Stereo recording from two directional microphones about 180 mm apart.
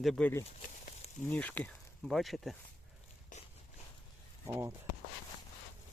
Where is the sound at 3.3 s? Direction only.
45° left (ahead or behind).